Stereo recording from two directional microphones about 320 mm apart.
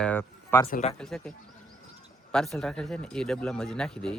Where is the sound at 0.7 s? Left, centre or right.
Left.